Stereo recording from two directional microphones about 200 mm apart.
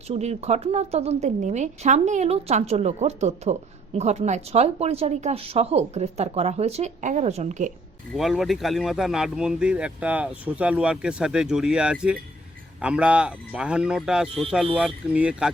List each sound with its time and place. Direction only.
0.1 s a woman's voice: 35° right (ahead or behind)
8.1 s speech: centre (ahead or behind)